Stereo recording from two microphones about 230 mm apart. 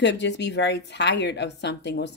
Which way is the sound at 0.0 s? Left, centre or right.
Left.